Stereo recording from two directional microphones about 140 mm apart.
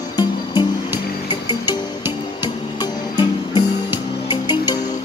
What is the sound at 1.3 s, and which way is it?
Music, 30° left (ahead or behind).